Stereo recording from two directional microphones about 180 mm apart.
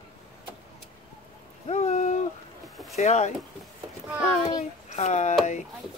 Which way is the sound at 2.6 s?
Centre (ahead or behind).